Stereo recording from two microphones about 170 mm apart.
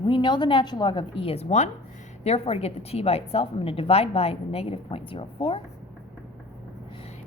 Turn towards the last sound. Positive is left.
turn(degrees=30)  # may be behind; listen again after turning